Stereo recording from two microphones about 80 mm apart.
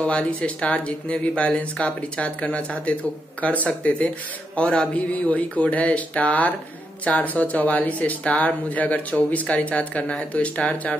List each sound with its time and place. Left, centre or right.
0.0 s speech: centre